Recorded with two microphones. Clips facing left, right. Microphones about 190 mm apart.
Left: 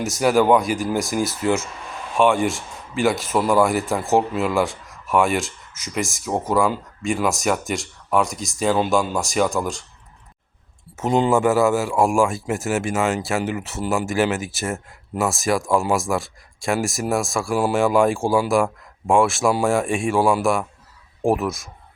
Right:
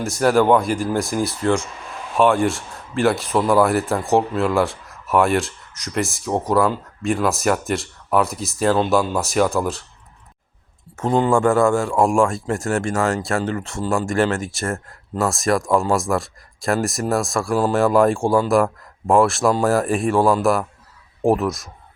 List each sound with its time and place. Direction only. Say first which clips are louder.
0.0 s speech: right 1 dB; centre (ahead or behind)
11.0 s speech: right 1 dB; 20° left (ahead or behind)
11.3 s speech: right 1 dB; 5° left (ahead or behind)